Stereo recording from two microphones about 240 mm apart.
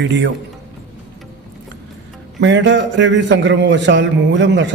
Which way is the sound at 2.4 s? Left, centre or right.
Right.